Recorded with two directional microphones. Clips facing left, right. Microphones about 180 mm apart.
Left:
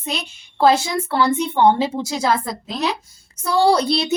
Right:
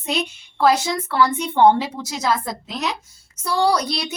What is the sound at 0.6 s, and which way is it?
A woman's voice, 25° left (ahead or behind).